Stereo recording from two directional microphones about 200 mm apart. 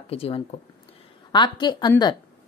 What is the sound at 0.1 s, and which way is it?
A woman's voice, 30° left (ahead or behind).